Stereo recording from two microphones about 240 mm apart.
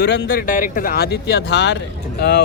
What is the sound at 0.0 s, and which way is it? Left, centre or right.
Speech, left.